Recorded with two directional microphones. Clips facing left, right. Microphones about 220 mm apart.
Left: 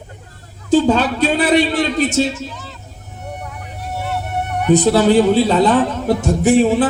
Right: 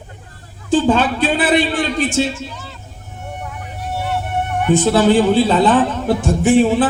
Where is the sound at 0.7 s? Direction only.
40° left (ahead or behind).